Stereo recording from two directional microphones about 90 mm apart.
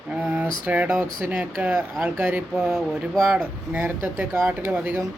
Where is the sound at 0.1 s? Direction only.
15° right (ahead or behind).